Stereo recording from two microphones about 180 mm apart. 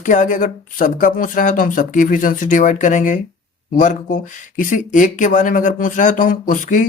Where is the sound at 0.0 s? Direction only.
45° left (ahead or behind).